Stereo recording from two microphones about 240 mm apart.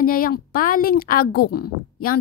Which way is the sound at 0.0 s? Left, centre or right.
Left.